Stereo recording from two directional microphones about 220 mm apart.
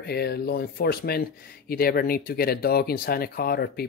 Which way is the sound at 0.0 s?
45° left (ahead or behind).